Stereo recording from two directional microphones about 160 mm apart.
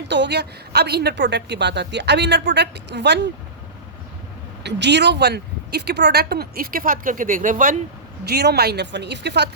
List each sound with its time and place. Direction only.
0.1 s a woman's voice: 90° right
4.6 s speech: 90° right; by 7.8 s 55° right (ahead or behind)
8.2 s a woman's voice: 90° right